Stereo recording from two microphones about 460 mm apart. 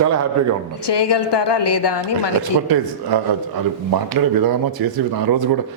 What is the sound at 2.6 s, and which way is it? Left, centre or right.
A man's voice, right.